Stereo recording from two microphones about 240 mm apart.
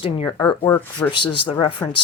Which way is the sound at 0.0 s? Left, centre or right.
Left.